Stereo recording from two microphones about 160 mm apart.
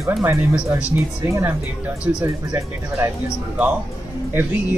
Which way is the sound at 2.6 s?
20° right (ahead or behind).